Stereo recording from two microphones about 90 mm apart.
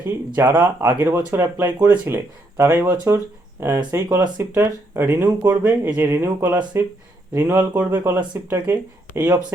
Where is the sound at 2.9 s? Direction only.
40° right (ahead or behind).